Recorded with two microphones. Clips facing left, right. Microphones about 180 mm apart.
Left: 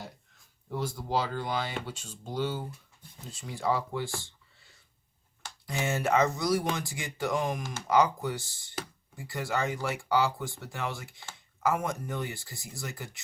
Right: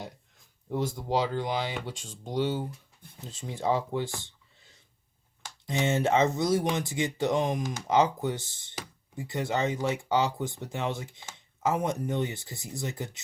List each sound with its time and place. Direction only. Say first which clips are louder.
0.7 s speech: right 3 dB; 20° right (ahead or behind)
5.6 s speech: right 4 dB; 20° right (ahead or behind)